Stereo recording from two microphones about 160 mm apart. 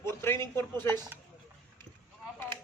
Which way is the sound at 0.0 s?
15° left (ahead or behind).